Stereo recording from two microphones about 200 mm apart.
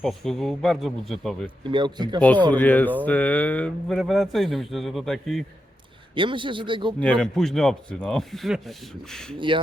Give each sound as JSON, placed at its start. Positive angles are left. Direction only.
{"t": 0.0, "sound": "speech", "side_deg": 0}
{"t": 1.6, "sound": "speech", "side_deg": -25}
{"t": 2.5, "sound": "speech", "side_deg": 10}
{"t": 6.1, "sound": "speech", "side_deg": -25}
{"t": 7.0, "sound": "speech", "side_deg": 5}
{"t": 9.5, "sound": "speech", "side_deg": -25}